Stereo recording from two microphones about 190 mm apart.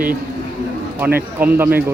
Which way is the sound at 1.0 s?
10° right (ahead or behind).